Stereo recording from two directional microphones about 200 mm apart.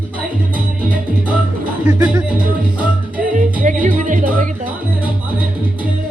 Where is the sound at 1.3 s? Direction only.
5° right (ahead or behind).